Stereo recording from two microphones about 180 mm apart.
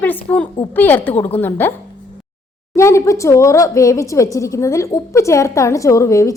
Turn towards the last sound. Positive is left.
turn(degrees=15)  # may be behind; listen again after turning